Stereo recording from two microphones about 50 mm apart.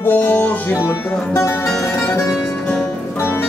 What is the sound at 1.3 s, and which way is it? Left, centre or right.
Music, left.